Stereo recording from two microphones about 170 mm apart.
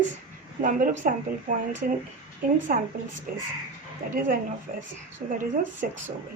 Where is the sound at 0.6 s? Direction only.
50° right (ahead or behind).